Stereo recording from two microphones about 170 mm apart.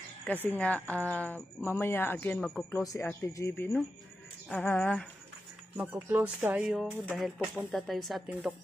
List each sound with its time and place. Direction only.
0.5 s speech: 10° left (ahead or behind)
2.8 s speech: 20° left (ahead or behind)
5.8 s speech: 10° right (ahead or behind)